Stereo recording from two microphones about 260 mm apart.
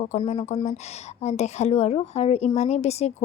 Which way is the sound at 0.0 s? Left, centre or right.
Left.